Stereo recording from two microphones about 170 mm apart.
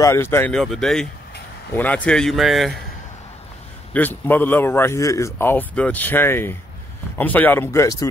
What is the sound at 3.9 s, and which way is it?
Speech, 10° left (ahead or behind).